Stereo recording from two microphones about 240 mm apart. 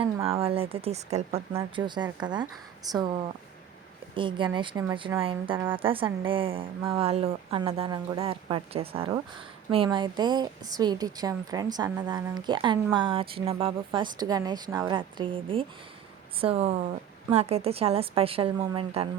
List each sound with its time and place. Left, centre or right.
0.0 s a woman's voice: right